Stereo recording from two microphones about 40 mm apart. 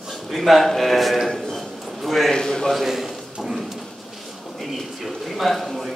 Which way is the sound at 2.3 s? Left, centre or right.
Centre.